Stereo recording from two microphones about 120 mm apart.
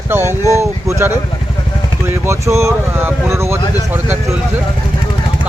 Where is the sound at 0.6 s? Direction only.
25° right (ahead or behind).